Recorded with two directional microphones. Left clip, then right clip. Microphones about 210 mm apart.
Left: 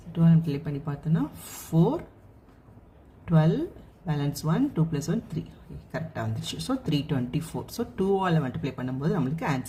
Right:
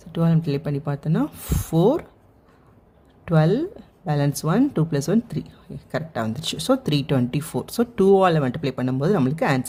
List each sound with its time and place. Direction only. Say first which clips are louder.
0.1 s speech: right 4 dB; 45° right (ahead or behind)
3.2 s speech: right 6 dB; 45° right (ahead or behind)